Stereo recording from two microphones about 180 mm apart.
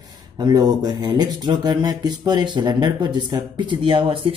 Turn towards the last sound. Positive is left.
turn(degrees=-25)  # may be behind; listen again after turning